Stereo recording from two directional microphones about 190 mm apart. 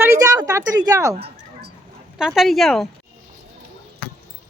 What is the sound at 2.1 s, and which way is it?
Speech, centre (ahead or behind).